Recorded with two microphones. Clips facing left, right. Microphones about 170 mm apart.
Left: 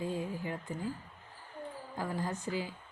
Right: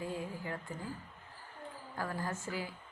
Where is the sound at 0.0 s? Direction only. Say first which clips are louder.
Left 4 dB; 20° left (ahead or behind).